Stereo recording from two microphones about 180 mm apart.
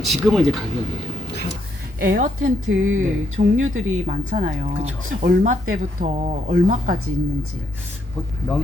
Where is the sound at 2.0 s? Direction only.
50° right (ahead or behind).